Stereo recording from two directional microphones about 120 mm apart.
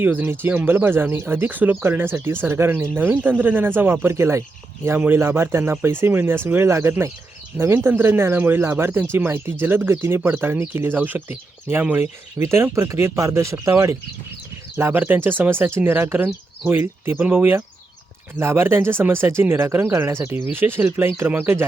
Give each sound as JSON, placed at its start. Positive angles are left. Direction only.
{"t": 0.0, "sound": "speech", "side_deg": -15}